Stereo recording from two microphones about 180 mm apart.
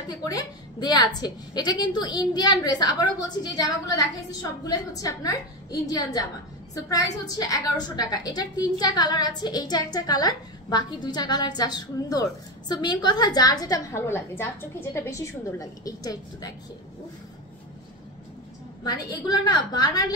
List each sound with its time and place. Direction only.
0.1 s a woman's voice: 20° left (ahead or behind)
18.9 s a woman's voice: 20° left (ahead or behind)